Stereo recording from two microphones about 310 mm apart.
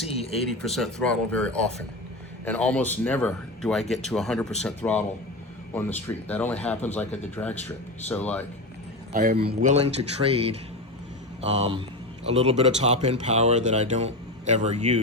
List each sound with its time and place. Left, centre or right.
0.9 s a man's voice: centre
9.1 s speech: right